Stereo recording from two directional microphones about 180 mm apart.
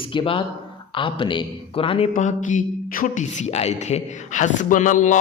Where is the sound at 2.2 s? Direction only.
45° left (ahead or behind).